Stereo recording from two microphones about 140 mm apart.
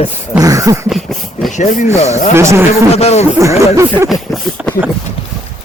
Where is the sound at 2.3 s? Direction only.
20° right (ahead or behind).